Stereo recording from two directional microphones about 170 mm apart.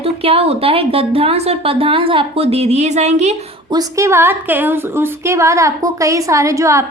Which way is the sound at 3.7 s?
20° right (ahead or behind).